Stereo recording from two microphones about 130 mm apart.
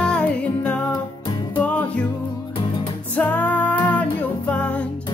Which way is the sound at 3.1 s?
10° left (ahead or behind).